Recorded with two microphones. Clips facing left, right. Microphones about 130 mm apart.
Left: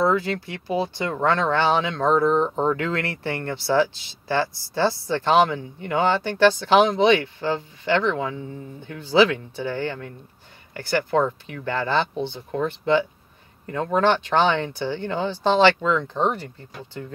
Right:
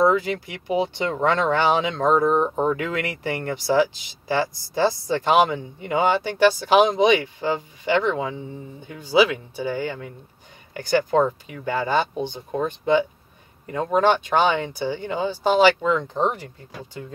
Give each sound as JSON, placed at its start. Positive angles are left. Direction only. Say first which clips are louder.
{"t": 0.0, "sound": "speech", "louder": "right 2 dB", "side_deg": -15}